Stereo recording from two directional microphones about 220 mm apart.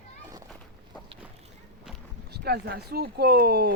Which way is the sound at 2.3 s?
45° right (ahead or behind).